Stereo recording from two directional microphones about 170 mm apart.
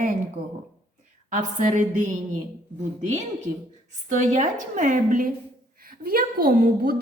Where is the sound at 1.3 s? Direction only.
50° right (ahead or behind).